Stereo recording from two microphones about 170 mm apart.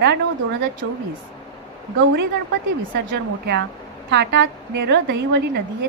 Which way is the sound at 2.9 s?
70° right (ahead or behind).